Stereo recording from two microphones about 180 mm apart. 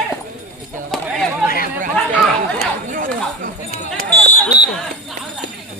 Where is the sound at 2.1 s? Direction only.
Centre (ahead or behind).